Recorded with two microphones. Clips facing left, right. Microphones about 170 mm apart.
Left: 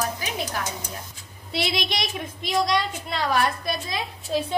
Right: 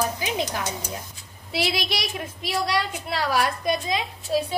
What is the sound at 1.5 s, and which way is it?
A woman's voice, 5° right (ahead or behind).